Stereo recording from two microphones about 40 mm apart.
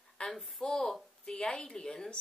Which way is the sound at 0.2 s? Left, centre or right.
Left.